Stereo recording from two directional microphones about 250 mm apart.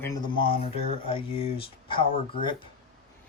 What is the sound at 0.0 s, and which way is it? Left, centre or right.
Speech, centre.